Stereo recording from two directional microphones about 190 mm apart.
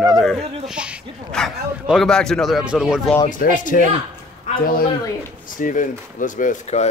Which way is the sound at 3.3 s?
45° left (ahead or behind).